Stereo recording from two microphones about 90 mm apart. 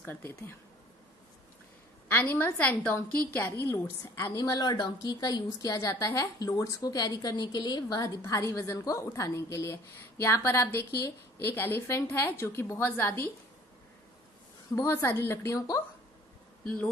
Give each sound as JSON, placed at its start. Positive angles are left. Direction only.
{"t": 0.0, "sound": "a woman's voice", "side_deg": 25}
{"t": 2.0, "sound": "a woman's voice", "side_deg": 20}
{"t": 4.4, "sound": "a woman's voice", "side_deg": 45}
{"t": 14.8, "sound": "a woman's voice", "side_deg": 30}
{"t": 16.6, "sound": "speech", "side_deg": 15}